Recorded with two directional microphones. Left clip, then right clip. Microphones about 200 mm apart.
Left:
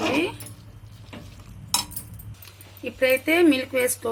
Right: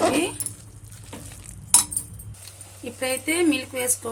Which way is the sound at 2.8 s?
Centre (ahead or behind).